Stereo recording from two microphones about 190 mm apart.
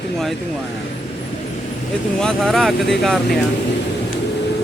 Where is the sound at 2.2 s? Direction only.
Centre (ahead or behind).